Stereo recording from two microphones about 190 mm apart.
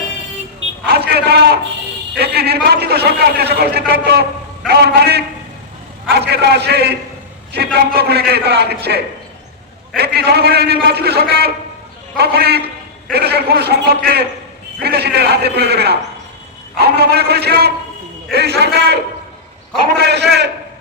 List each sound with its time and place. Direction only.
0.9 s a sound: 55° right (ahead or behind)
2.1 s a man's voice: 55° right (ahead or behind)
10.0 s a man's voice: 60° right (ahead or behind)
20.0 s a man's voice: 60° right (ahead or behind)